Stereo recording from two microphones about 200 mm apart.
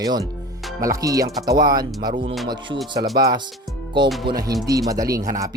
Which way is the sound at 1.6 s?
50° right (ahead or behind).